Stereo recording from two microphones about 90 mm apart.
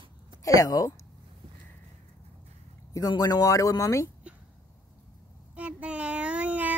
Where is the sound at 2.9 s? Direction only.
45° left (ahead or behind).